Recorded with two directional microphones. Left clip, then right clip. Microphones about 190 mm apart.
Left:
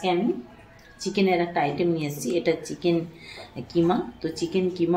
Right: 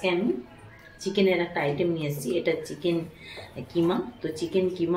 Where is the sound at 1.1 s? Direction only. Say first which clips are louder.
Left 1 dB; 30° left (ahead or behind).